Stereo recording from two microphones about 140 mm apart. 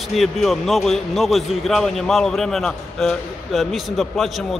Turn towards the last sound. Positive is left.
turn(degrees=0)  # may be behind; listen again after turning